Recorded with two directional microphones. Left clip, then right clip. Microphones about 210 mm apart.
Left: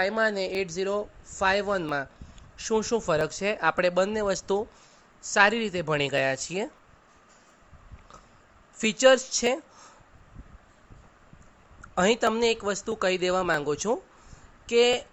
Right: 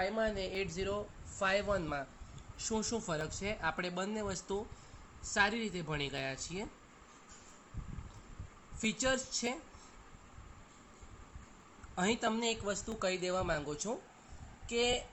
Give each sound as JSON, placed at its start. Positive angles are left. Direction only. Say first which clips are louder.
{"t": 0.0, "sound": "speech", "louder": "left 10 dB", "side_deg": 45}
{"t": 8.8, "sound": "speech", "louder": "left 15 dB", "side_deg": 50}
{"t": 11.9, "sound": "speech", "louder": "left 11 dB", "side_deg": 50}